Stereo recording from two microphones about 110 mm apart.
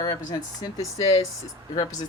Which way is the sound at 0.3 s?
35° left (ahead or behind).